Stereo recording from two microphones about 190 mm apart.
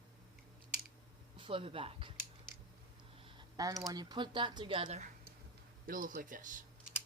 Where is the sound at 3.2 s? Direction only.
20° right (ahead or behind).